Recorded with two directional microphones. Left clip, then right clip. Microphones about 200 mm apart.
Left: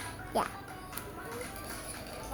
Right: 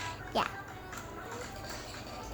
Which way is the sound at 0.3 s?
Centre (ahead or behind).